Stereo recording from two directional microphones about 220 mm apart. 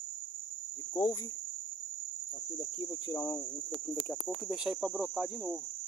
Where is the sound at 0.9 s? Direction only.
15° left (ahead or behind).